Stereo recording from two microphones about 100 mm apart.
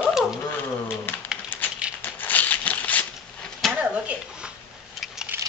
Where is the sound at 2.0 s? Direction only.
15° left (ahead or behind).